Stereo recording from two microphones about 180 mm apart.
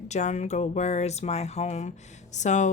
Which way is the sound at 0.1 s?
40° left (ahead or behind).